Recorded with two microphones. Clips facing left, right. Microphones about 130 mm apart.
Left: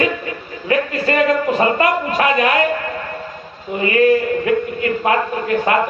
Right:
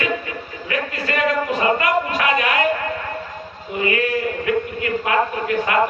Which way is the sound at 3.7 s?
35° left (ahead or behind).